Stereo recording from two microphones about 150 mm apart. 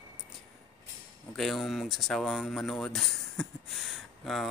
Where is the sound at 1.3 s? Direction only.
Centre (ahead or behind).